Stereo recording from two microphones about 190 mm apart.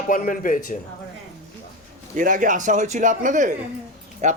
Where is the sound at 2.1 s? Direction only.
45° right (ahead or behind).